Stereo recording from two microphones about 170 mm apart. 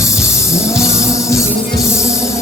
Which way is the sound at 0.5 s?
15° left (ahead or behind).